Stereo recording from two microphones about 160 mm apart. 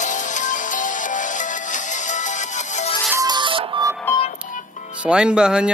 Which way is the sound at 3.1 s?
25° right (ahead or behind).